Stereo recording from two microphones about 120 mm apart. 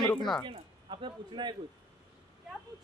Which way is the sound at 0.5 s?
45° right (ahead or behind).